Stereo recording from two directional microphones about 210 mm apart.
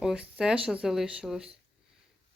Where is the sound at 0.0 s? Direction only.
5° right (ahead or behind).